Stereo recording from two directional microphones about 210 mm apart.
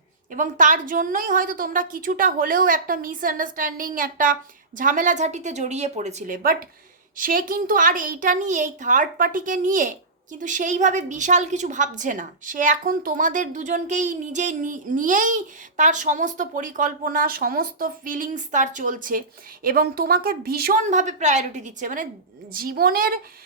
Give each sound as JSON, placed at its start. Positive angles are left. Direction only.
{"t": 0.3, "sound": "a woman's voice", "side_deg": -40}